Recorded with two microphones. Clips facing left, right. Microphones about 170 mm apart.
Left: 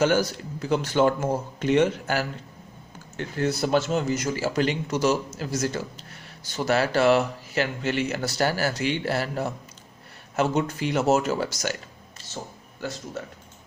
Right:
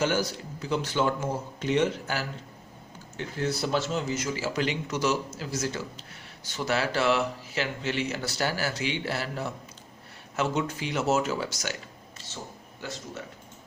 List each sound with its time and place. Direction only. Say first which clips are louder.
0.0 s speech: left 5 dB; 50° left (ahead or behind)